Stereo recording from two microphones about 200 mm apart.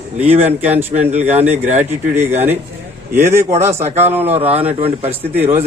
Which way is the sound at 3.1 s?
10° right (ahead or behind).